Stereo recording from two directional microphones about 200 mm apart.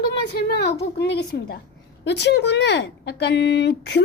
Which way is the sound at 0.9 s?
55° left (ahead or behind).